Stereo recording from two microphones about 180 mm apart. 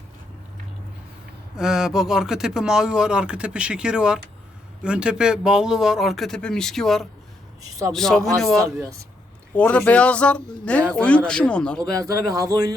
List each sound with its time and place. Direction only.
1.5 s a man's voice: 5° right (ahead or behind)
11.8 s speech: 20° right (ahead or behind)